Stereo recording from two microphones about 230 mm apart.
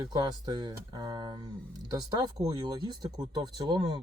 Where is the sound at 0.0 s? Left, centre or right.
Centre.